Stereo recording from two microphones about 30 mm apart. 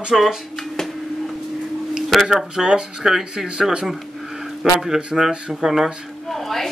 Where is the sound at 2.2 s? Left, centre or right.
Centre.